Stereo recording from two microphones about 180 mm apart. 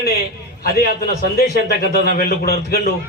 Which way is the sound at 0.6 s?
60° left (ahead or behind).